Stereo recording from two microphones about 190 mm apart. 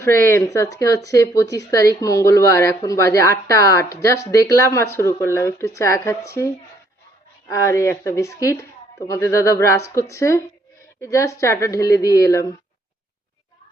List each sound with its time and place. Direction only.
0.0 s speech: 15° left (ahead or behind)